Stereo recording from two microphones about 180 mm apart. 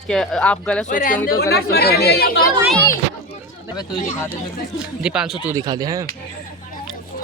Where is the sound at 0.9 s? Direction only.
45° left (ahead or behind).